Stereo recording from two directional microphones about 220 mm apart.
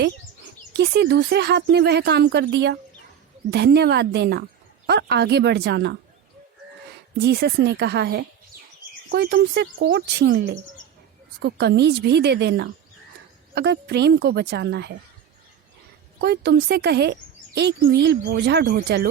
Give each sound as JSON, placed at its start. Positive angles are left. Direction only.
{"t": 0.8, "sound": "speech", "side_deg": -50}
{"t": 7.2, "sound": "speech", "side_deg": -50}
{"t": 16.2, "sound": "speech", "side_deg": -50}